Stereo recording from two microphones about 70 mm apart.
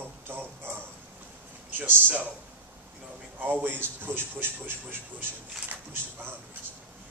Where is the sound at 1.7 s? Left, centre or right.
Right.